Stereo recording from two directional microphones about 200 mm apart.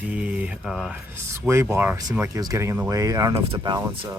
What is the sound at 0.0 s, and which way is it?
Speech, 5° right (ahead or behind).